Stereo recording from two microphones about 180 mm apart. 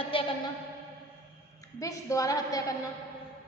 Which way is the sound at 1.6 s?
20° left (ahead or behind).